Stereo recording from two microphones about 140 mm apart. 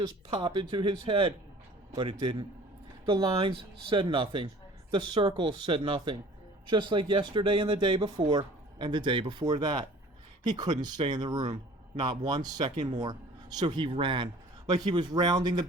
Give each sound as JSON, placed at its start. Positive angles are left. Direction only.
{"t": 0.0, "sound": "speech", "side_deg": -30}